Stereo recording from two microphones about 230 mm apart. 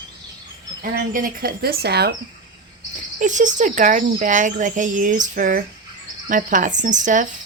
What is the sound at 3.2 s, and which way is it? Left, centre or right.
A woman's voice, right.